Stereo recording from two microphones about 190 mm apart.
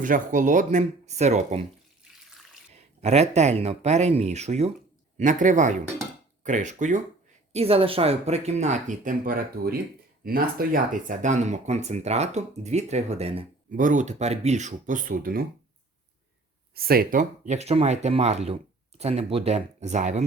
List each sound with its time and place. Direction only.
0.0 s speech: 45° right (ahead or behind)
3.0 s speech: 35° right (ahead or behind)
7.5 s speech: 30° right (ahead or behind)
13.7 s speech: 45° right (ahead or behind)
16.7 s speech: 50° right (ahead or behind)